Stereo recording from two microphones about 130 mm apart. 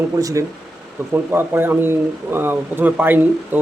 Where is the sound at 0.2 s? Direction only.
25° right (ahead or behind).